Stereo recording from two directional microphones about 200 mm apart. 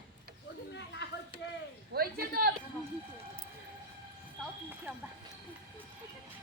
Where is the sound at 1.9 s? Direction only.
50° right (ahead or behind).